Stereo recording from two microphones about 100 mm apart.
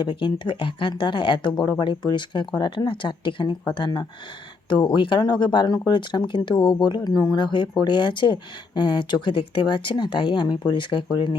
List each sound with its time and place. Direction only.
0.0 s speech: 50° left (ahead or behind)